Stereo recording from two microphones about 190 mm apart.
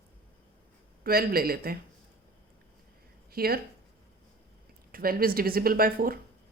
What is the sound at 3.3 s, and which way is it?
Speech, 50° right (ahead or behind).